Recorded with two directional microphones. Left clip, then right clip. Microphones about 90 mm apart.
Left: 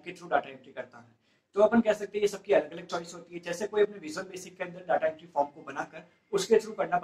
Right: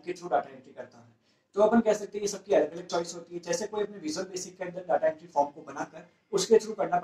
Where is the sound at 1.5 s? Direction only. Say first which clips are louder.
Even; 30° right (ahead or behind).